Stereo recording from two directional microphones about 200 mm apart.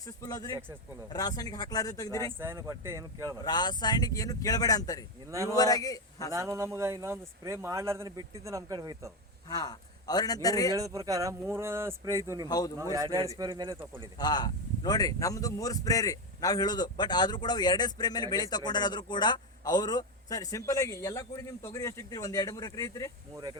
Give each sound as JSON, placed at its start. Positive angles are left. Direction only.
{"t": 0.0, "sound": "a man's voice", "side_deg": 15}
{"t": 2.4, "sound": "speech", "side_deg": -15}
{"t": 3.4, "sound": "speech", "side_deg": 20}
{"t": 5.3, "sound": "speech", "side_deg": -15}
{"t": 5.5, "sound": "a man's voice", "side_deg": 20}
{"t": 6.3, "sound": "speech", "side_deg": -15}
{"t": 9.5, "sound": "speech", "side_deg": 20}
{"t": 10.8, "sound": "speech", "side_deg": -15}
{"t": 12.5, "sound": "speech", "side_deg": 20}
{"t": 12.8, "sound": "speech", "side_deg": -15}
{"t": 14.2, "sound": "speech", "side_deg": 20}